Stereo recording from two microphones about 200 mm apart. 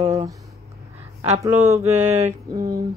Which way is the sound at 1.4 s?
15° right (ahead or behind).